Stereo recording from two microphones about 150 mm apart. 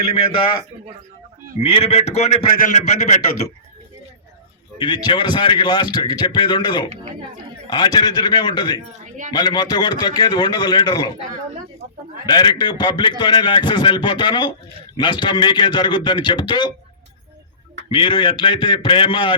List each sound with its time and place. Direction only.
0.3 s a man's voice: 35° left (ahead or behind)
1.5 s a man's voice: 40° left (ahead or behind)
4.8 s a man's voice: 30° left (ahead or behind)
12.2 s a man's voice: 30° left (ahead or behind)
17.8 s a man's voice: 35° left (ahead or behind)